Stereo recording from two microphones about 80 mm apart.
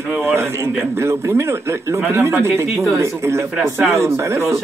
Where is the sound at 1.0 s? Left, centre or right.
Right.